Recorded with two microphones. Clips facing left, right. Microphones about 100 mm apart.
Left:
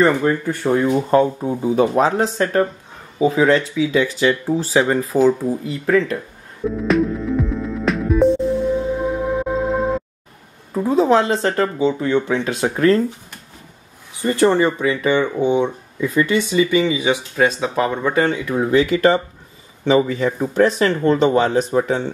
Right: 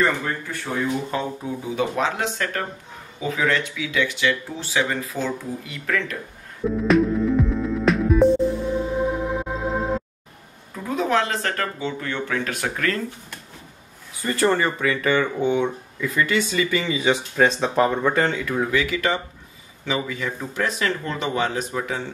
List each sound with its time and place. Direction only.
0.7 s speech: 45° left (ahead or behind)
5.9 s speech: 25° left (ahead or behind)
6.6 s music: centre (ahead or behind)
10.7 s speech: 30° left (ahead or behind)
14.1 s speech: 20° left (ahead or behind)
18.7 s speech: 30° left (ahead or behind)